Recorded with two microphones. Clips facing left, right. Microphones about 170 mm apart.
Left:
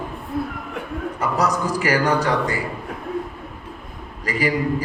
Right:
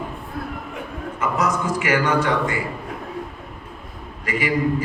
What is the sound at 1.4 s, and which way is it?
A man's voice, 35° left (ahead or behind).